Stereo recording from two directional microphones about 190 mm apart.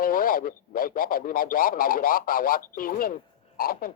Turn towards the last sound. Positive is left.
turn(degrees=50)  # may be behind; listen again after turning